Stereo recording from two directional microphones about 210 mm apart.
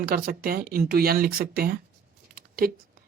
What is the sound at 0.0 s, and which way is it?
Speech, 45° right (ahead or behind).